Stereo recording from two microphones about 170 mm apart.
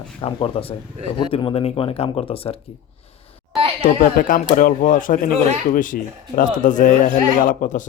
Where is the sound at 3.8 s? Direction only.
50° left (ahead or behind).